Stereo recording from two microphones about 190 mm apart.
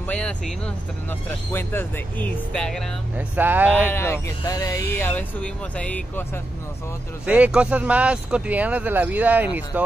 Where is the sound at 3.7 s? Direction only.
10° left (ahead or behind).